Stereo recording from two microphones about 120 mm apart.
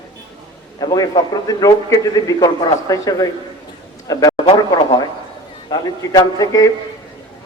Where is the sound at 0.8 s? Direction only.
30° left (ahead or behind).